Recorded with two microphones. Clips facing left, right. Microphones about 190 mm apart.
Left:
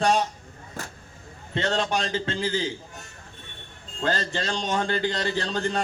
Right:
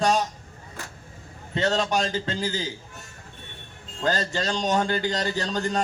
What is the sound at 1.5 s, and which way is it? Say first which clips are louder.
A man's voice: right 2 dB; 40° right (ahead or behind).